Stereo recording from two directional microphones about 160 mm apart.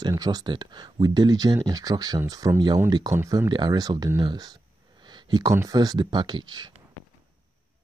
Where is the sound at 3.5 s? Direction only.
25° right (ahead or behind).